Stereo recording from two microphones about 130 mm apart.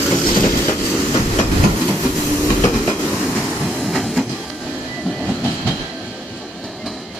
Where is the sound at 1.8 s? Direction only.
Centre (ahead or behind).